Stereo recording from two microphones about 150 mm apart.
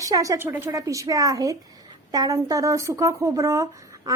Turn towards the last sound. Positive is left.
turn(degrees=-20)  # may be behind; listen again after turning